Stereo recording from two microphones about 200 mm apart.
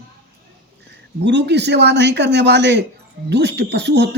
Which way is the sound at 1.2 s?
60° right (ahead or behind).